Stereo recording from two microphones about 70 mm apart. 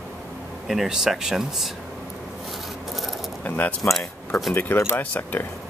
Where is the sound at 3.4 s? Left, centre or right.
Left.